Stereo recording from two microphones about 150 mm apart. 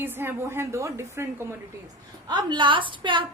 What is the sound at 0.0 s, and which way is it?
A woman's voice, 15° right (ahead or behind).